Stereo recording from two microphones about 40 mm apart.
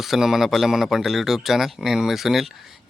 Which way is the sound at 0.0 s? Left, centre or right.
Centre.